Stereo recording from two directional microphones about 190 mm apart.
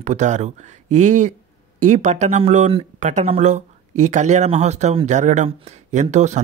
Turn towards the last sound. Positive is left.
turn(degrees=-40)  # may be behind; listen again after turning